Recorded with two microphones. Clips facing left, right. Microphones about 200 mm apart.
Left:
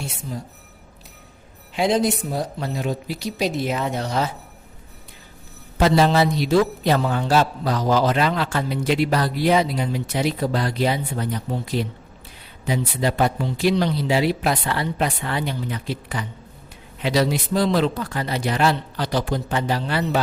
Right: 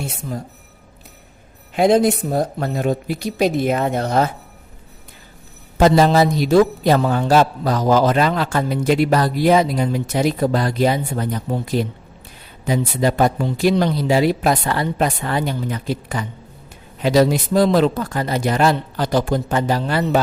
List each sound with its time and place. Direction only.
0.0 s a man's voice: 50° right (ahead or behind)
1.7 s a man's voice: 50° right (ahead or behind)
5.7 s a man's voice: 45° right (ahead or behind)